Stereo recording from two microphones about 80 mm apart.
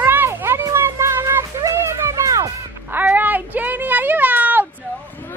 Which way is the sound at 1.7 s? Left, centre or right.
Right.